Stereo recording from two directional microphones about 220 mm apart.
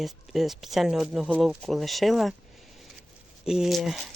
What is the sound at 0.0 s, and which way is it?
Speech, centre (ahead or behind).